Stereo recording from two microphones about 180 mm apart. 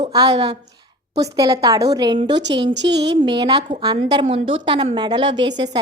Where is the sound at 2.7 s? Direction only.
75° right (ahead or behind).